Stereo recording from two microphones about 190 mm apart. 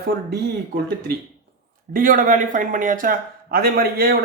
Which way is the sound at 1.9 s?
45° right (ahead or behind).